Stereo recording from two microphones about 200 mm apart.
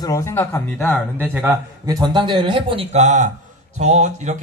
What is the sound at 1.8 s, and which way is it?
A man's voice, 20° right (ahead or behind).